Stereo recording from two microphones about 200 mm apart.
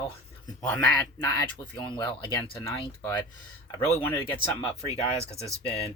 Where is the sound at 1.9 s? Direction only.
25° left (ahead or behind).